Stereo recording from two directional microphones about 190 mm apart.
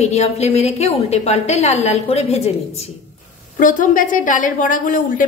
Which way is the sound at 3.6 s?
45° left (ahead or behind).